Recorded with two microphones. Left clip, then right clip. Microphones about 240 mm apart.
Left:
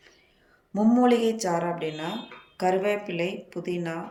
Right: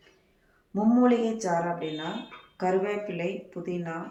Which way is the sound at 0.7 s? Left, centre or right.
Left.